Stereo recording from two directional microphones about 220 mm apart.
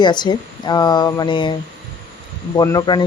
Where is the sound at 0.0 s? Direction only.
20° left (ahead or behind).